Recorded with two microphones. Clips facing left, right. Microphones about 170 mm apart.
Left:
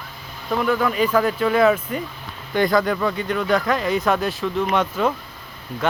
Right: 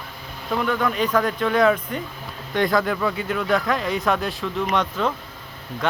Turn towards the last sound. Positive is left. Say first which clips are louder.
# left 2 dB
turn(degrees=5)  # may be behind; listen again after turning